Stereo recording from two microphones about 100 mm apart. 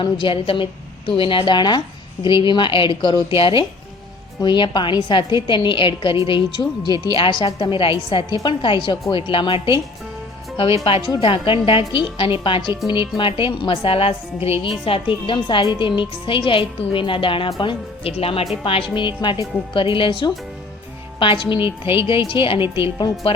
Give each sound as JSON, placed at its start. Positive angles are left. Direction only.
{"t": 0.0, "sound": "a woman's voice", "side_deg": 60}
{"t": 11.1, "sound": "a woman's voice", "side_deg": 60}
{"t": 18.6, "sound": "a woman's voice", "side_deg": 60}
{"t": 21.6, "sound": "speech", "side_deg": -25}
{"t": 22.0, "sound": "a woman's voice", "side_deg": 60}
{"t": 22.8, "sound": "a woman's voice", "side_deg": 45}